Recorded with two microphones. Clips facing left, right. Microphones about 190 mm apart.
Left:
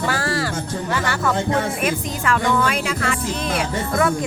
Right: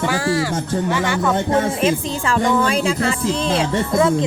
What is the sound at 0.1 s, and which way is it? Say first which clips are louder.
Speech: right 3 dB; 10° right (ahead or behind).